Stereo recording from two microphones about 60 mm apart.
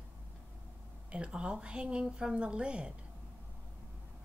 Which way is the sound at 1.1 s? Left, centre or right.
Centre.